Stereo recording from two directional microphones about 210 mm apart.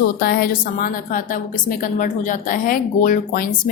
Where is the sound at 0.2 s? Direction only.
45° left (ahead or behind).